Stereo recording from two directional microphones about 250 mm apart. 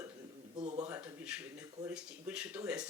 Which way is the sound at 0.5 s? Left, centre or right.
Right.